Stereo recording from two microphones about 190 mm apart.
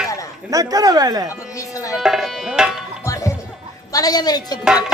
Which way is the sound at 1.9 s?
5° right (ahead or behind).